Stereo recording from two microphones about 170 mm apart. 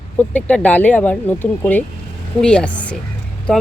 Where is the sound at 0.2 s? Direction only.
10° left (ahead or behind).